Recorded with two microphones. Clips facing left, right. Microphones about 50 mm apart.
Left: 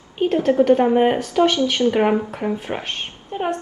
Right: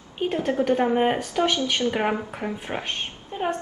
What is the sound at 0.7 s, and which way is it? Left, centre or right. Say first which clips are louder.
A woman's voice: left 3 dB; centre.